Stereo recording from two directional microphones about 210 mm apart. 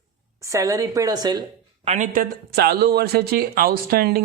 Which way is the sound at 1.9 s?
40° right (ahead or behind).